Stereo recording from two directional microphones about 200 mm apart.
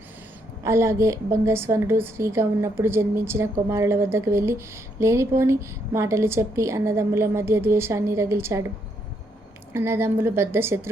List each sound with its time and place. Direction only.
0.6 s a woman's voice: 15° right (ahead or behind)
9.7 s a woman's voice: 10° right (ahead or behind)